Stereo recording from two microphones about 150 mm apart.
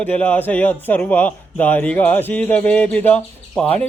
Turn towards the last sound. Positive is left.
turn(degrees=10)  # may be behind; listen again after turning